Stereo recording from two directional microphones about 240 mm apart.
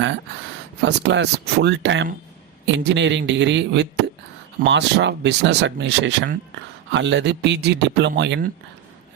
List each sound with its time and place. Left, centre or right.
0.8 s speech: right